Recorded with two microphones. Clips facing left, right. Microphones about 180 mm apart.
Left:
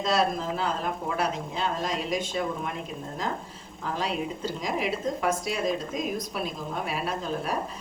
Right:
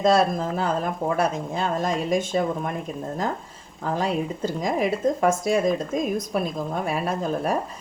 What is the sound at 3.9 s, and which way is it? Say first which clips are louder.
A woman's voice: right 5 dB; 50° right (ahead or behind).